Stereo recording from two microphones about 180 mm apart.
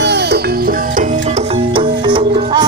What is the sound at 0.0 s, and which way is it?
Music, 70° right (ahead or behind).